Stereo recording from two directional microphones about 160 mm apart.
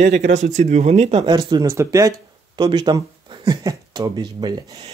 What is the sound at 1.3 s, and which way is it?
Speech, 25° right (ahead or behind).